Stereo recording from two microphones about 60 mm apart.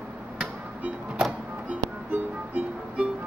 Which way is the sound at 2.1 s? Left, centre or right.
Right.